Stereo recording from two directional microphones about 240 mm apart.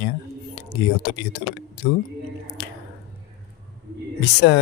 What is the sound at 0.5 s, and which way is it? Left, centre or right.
Speech, left.